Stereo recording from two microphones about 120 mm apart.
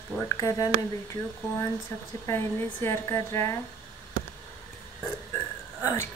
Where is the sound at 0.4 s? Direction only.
25° left (ahead or behind).